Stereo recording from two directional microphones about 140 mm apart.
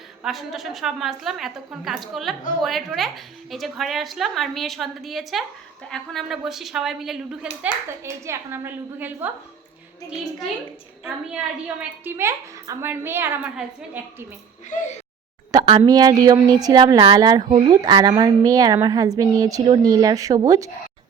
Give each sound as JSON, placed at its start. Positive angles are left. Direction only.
{"t": 0.2, "sound": "a woman's voice", "side_deg": 0}
{"t": 7.6, "sound": "a woman's voice", "side_deg": -20}
{"t": 11.0, "sound": "a woman's voice", "side_deg": -5}
{"t": 14.7, "sound": "speech", "side_deg": 60}
{"t": 15.5, "sound": "a sound", "side_deg": -25}
{"t": 15.9, "sound": "speech", "side_deg": -30}